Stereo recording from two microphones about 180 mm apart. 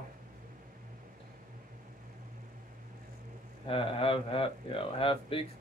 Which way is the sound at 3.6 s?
30° left (ahead or behind).